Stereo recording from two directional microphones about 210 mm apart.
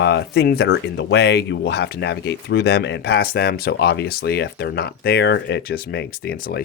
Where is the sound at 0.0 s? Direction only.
55° left (ahead or behind).